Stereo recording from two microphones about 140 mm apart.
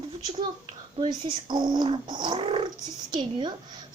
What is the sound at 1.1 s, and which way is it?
A child's voice, 30° right (ahead or behind).